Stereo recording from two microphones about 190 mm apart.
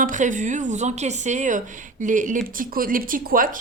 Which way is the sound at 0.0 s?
40° right (ahead or behind).